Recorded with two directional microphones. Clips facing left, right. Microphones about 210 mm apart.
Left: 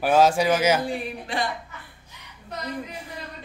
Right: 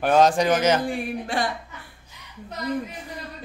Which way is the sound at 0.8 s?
50° right (ahead or behind).